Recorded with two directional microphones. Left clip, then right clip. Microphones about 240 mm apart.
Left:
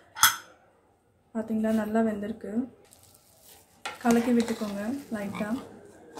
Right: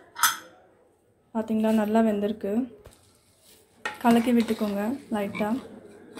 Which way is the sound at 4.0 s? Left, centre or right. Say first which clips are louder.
Right 2 dB; centre.